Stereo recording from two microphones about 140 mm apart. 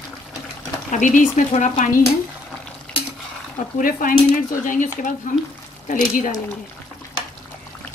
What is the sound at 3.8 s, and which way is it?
Speech, 80° left.